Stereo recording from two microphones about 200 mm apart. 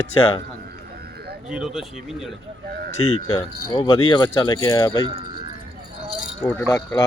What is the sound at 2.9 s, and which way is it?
Speech, 35° left (ahead or behind).